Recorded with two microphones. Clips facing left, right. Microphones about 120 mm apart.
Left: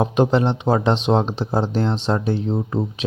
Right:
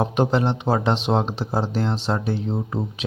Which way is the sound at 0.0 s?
20° left (ahead or behind).